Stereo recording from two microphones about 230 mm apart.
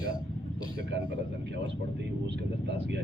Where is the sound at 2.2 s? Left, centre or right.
Right.